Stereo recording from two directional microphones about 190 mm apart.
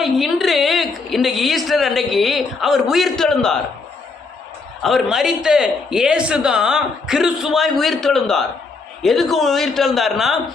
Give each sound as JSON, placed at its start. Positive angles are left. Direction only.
{"t": 0.0, "sound": "a woman's voice", "side_deg": 0}
{"t": 4.8, "sound": "a man's voice", "side_deg": 0}